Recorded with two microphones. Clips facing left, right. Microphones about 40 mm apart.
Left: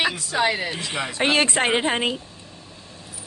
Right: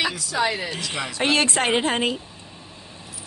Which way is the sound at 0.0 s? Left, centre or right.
Left.